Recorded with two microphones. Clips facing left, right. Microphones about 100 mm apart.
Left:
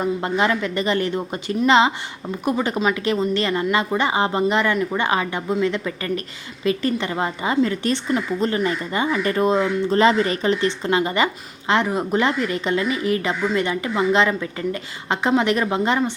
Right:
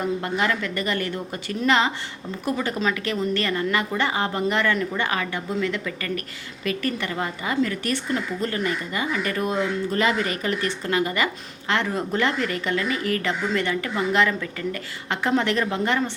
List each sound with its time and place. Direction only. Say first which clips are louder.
0.0 s a woman's voice: left 4 dB; 25° left (ahead or behind)